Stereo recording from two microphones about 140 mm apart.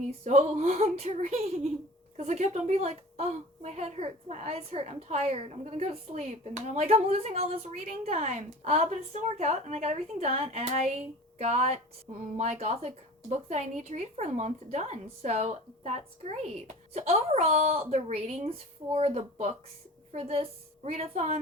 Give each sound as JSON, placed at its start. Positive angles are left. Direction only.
{"t": 0.3, "sound": "a woman's voice", "side_deg": -55}